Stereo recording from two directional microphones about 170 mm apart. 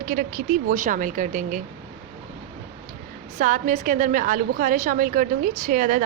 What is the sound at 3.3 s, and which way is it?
A woman's voice, 50° right (ahead or behind).